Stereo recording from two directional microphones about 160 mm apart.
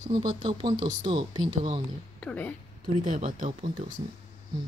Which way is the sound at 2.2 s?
10° left (ahead or behind).